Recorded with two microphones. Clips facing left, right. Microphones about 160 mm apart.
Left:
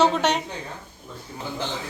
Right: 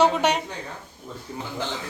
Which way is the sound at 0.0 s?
10° right (ahead or behind).